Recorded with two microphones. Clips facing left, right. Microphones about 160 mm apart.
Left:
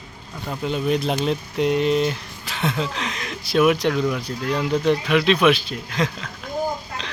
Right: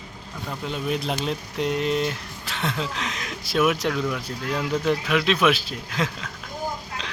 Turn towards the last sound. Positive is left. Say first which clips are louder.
# left 2 dB
turn(degrees=-5)  # may be behind; listen again after turning